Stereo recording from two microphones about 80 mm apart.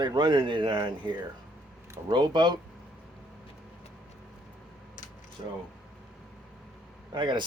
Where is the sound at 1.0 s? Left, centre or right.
Right.